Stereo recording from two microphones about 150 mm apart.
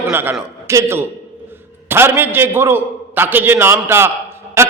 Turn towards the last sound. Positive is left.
turn(degrees=-15)  # may be behind; listen again after turning